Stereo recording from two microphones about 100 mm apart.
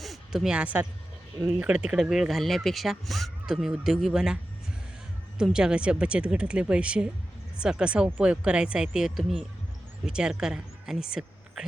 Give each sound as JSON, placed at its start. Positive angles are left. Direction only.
{"t": 0.0, "sound": "speech", "side_deg": 0}
{"t": 1.4, "sound": "speech", "side_deg": -25}
{"t": 1.6, "sound": "speech", "side_deg": -10}
{"t": 5.4, "sound": "speech", "side_deg": -5}